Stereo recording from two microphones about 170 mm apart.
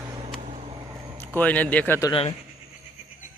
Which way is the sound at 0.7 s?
20° right (ahead or behind).